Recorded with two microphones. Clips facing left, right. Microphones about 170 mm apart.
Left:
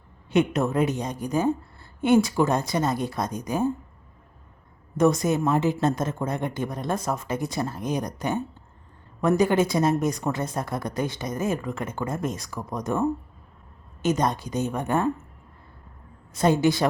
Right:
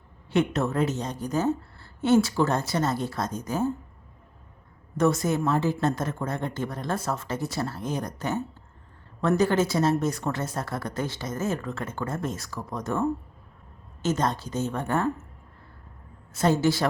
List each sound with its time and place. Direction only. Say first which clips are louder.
0.3 s a woman's voice: left 2 dB; 15° left (ahead or behind)
5.2 s a woman's voice: left 2 dB; 15° left (ahead or behind)
16.4 s a woman's voice: left 2 dB; 15° left (ahead or behind)